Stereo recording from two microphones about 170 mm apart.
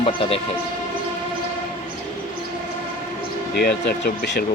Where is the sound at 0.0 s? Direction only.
35° left (ahead or behind).